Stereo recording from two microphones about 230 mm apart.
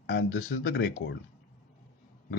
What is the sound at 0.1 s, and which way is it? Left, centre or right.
Speech, left.